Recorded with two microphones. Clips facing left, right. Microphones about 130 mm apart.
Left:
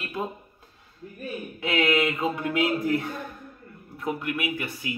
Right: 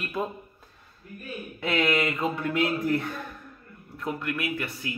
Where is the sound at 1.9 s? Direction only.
15° left (ahead or behind).